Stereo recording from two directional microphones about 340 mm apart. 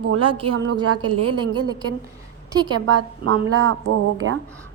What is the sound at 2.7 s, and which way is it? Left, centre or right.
A woman's voice, right.